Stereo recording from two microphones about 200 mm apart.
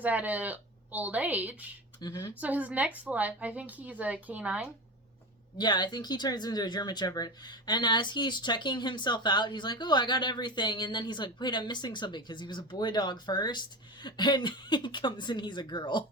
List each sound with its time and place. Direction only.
0.0 s a woman's voice: 10° right (ahead or behind)
2.0 s speech: 15° left (ahead or behind)
2.4 s a woman's voice: 5° right (ahead or behind)
5.5 s speech: 20° left (ahead or behind)